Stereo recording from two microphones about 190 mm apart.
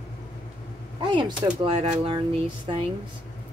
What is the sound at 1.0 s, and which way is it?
A woman's voice, 25° right (ahead or behind).